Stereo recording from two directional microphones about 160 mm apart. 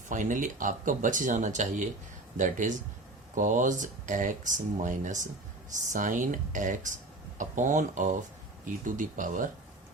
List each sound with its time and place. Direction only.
0.1 s speech: 55° right (ahead or behind)